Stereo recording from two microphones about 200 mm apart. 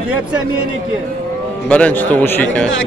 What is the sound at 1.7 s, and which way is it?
A man's voice, 5° left (ahead or behind).